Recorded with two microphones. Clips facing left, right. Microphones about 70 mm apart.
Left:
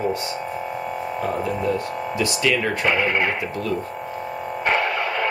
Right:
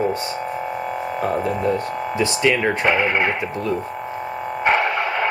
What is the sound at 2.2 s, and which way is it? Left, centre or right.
Speech, right.